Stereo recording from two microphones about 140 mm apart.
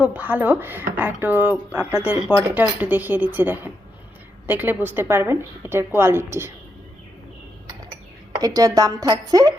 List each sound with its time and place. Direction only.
0.0 s a woman's voice: 10° right (ahead or behind)
8.4 s a woman's voice: 25° right (ahead or behind)